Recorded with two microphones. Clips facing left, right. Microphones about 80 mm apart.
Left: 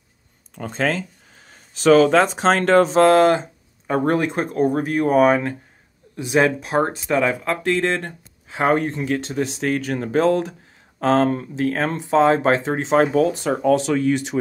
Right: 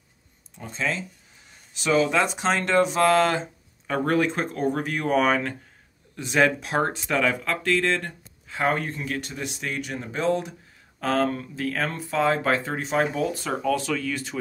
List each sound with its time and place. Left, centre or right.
0.7 s speech: left
2.2 s speech: left
3.1 s speech: left
4.3 s speech: centre
4.7 s speech: left
6.1 s speech: centre
7.1 s speech: left
9.6 s speech: left
9.9 s speech: left
11.0 s speech: left
12.9 s speech: left
13.3 s speech: left